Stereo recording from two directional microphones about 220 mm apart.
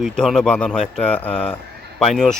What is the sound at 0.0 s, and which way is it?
Speech, centre (ahead or behind).